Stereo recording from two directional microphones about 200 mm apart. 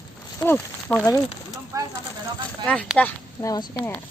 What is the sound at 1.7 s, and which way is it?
Speech, 15° right (ahead or behind).